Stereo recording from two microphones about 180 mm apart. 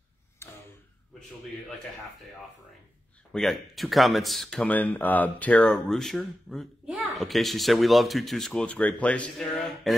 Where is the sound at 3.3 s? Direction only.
Centre (ahead or behind).